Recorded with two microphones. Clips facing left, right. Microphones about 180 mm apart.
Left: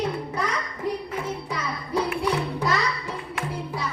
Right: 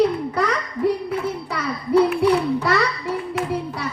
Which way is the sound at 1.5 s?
65° right (ahead or behind).